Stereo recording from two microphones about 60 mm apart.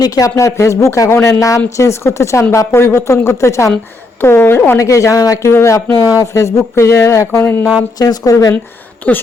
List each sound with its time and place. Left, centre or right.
0.0 s a woman's voice: left
4.2 s a woman's voice: left
4.8 s a woman's voice: left
5.5 s a woman's voice: left
5.7 s a woman's voice: left
7.9 s speech: left
9.1 s speech: left